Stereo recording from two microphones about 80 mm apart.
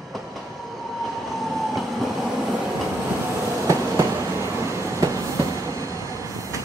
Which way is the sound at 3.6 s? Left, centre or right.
Right.